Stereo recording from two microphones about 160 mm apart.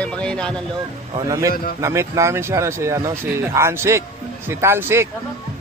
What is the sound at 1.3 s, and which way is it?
Speech, 20° right (ahead or behind).